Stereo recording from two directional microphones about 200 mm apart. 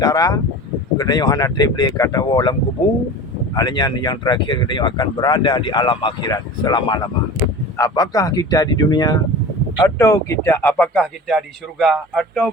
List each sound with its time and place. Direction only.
0.0 s speech: 20° left (ahead or behind); by 12.5 s 5° left (ahead or behind)